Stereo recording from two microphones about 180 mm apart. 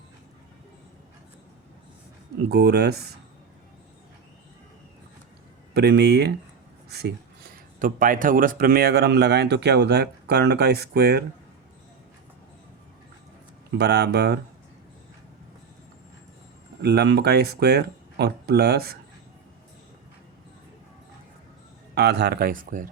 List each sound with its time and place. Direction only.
2.5 s speech: 65° right (ahead or behind)
5.7 s speech: 65° right (ahead or behind)
13.7 s speech: 65° right (ahead or behind)
16.8 s speech: 65° right (ahead or behind)
21.9 s speech: 65° right (ahead or behind); by 22.9 s 50° right (ahead or behind)